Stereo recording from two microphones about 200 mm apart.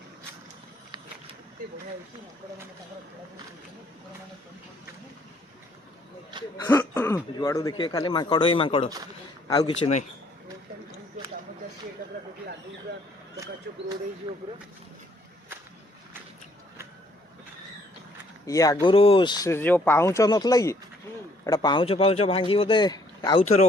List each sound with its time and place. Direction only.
6.7 s speech: 10° left (ahead or behind)
9.8 s speech: 35° left (ahead or behind)
12.0 s a sound: 45° right (ahead or behind)
18.4 s speech: 15° left (ahead or behind)